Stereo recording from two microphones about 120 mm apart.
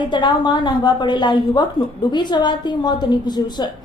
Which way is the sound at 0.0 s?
40° left (ahead or behind).